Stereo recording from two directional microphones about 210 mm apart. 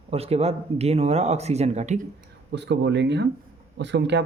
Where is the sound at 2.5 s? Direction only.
55° right (ahead or behind).